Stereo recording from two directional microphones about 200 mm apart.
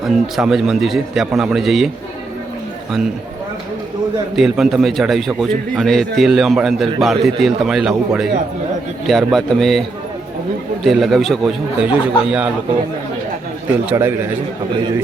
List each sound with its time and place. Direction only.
0.1 s a man's voice: centre (ahead or behind)
4.4 s a man's voice: centre (ahead or behind)
10.8 s a man's voice: centre (ahead or behind)
13.8 s a man's voice: 10° right (ahead or behind)